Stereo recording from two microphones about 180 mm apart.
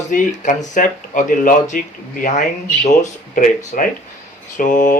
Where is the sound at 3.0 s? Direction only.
45° left (ahead or behind).